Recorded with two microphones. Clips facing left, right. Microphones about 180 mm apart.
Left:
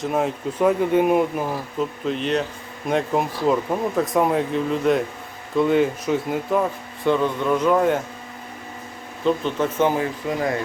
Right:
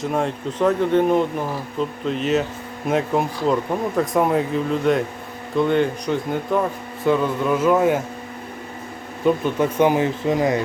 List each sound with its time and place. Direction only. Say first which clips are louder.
0.0 s speech: even; 5° left (ahead or behind)
2.0 s a man's voice: right 3 dB; centre (ahead or behind)
9.2 s speech: right 2 dB; 10° right (ahead or behind)